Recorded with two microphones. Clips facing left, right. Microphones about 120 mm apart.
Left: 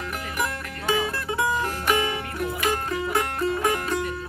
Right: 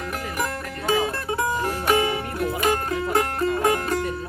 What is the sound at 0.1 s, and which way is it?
Music, 35° right (ahead or behind).